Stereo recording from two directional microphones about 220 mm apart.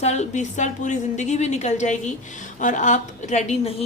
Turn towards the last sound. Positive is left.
turn(degrees=30)  # may be behind; listen again after turning